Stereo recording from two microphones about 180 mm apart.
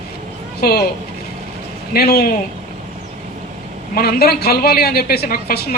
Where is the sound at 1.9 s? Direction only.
60° left (ahead or behind).